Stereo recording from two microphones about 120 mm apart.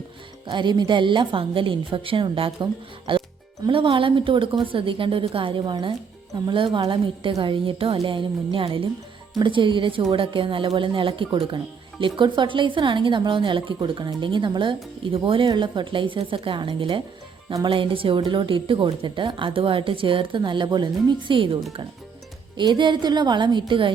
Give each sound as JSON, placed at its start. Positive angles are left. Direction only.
{"t": 0.4, "sound": "a woman's voice", "side_deg": -40}
{"t": 3.1, "sound": "music", "side_deg": -45}
{"t": 3.7, "sound": "a woman's voice", "side_deg": -45}